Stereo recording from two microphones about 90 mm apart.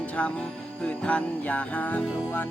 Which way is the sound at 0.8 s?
15° left (ahead or behind).